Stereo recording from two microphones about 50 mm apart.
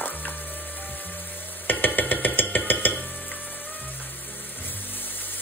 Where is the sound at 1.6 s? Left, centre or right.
Left.